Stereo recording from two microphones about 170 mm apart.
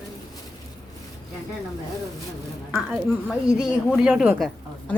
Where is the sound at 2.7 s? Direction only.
5° right (ahead or behind).